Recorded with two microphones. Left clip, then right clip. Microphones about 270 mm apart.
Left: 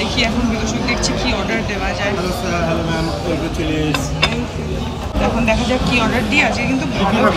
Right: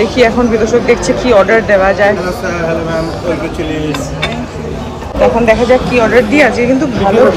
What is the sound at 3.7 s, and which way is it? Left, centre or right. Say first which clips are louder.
Speech: left 1 dB; centre.